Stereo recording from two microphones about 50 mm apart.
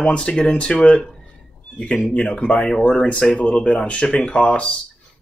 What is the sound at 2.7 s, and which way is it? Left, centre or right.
Speech, centre.